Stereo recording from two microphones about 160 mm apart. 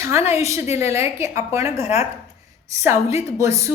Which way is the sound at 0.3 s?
20° right (ahead or behind).